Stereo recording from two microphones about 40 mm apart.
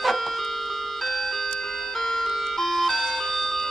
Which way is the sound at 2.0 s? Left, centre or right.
Centre.